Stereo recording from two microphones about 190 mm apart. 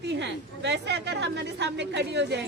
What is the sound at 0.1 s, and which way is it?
A woman's voice, 65° right (ahead or behind).